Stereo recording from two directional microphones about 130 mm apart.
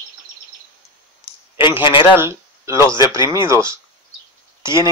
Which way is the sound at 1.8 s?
40° left (ahead or behind).